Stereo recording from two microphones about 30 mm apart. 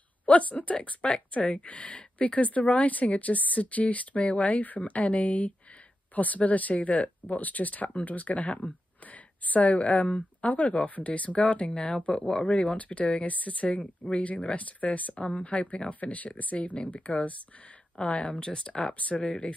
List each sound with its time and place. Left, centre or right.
0.2 s speech: left
0.8 s speech: left
4.2 s speech: left
6.1 s a woman's voice: left
12.0 s speech: left
12.8 s speech: left
15.9 s speech: left
18.3 s speech: left
18.9 s speech: left